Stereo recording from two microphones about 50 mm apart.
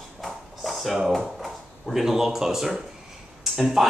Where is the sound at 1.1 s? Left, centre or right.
Centre.